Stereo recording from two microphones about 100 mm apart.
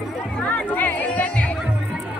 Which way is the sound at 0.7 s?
15° left (ahead or behind).